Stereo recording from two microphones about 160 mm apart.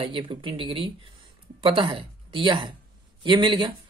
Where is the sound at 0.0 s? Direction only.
35° right (ahead or behind).